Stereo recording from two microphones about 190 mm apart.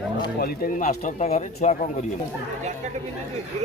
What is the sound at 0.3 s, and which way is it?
Speech, 50° left (ahead or behind).